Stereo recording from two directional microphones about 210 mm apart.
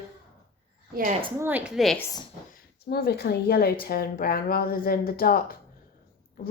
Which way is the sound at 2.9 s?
50° left (ahead or behind).